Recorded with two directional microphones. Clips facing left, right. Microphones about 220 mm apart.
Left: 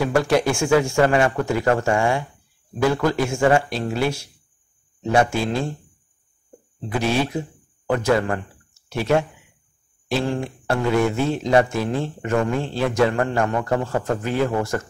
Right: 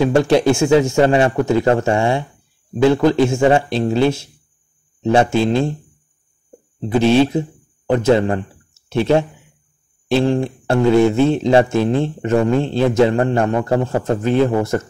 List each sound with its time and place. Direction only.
0.0 s speech: 25° right (ahead or behind)
6.9 s a man's voice: 25° right (ahead or behind)